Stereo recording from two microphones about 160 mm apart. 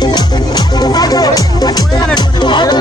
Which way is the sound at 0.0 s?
25° left (ahead or behind).